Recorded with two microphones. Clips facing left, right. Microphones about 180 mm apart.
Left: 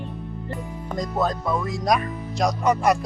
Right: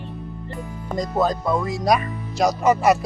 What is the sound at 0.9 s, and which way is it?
Speech, centre (ahead or behind).